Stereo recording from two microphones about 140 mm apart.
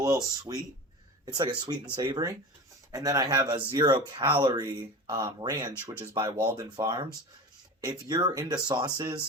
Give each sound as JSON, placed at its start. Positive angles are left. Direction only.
{"t": 0.0, "sound": "speech", "side_deg": -25}